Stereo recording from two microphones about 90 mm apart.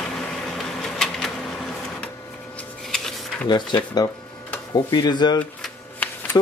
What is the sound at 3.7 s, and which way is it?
Speech, 55° left (ahead or behind).